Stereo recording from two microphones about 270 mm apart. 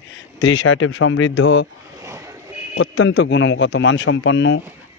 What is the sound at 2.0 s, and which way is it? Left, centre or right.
Vehicle, centre.